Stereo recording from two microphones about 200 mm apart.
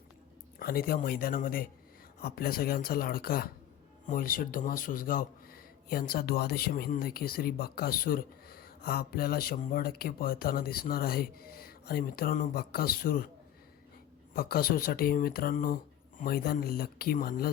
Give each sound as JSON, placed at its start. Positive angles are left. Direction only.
{"t": 0.6, "sound": "speech", "side_deg": 50}
{"t": 14.3, "sound": "speech", "side_deg": 50}